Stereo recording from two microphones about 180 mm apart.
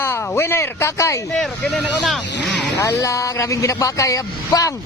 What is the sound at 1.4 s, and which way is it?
Speech, centre (ahead or behind).